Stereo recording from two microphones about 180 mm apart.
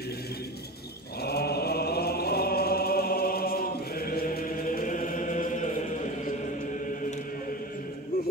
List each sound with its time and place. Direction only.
1.2 s chant: 60° left (ahead or behind); by 6.3 s 45° left (ahead or behind)